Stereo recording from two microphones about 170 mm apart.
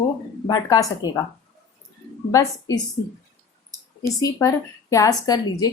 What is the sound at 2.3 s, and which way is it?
Speech, 20° left (ahead or behind).